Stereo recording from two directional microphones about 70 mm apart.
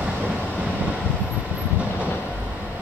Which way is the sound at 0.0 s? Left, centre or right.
Right.